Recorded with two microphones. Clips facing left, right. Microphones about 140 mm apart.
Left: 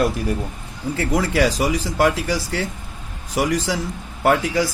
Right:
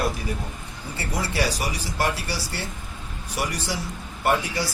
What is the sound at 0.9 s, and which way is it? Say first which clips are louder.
A man's voice: left 8 dB; 90° left.